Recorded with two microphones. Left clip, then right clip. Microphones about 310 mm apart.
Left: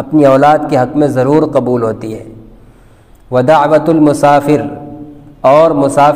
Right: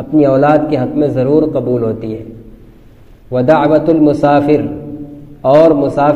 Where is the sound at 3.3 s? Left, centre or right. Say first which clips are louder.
Left 2 dB; left.